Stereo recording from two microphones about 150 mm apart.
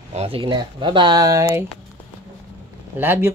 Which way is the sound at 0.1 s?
40° right (ahead or behind).